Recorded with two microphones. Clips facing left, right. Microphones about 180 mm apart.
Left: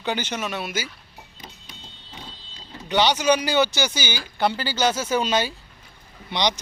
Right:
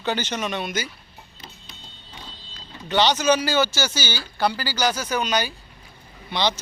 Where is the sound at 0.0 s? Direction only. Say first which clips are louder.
Right 1 dB; 10° left (ahead or behind).